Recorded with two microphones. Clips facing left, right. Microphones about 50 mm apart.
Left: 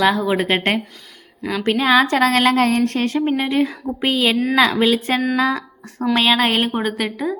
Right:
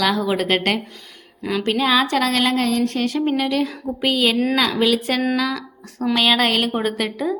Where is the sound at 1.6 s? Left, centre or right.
Left.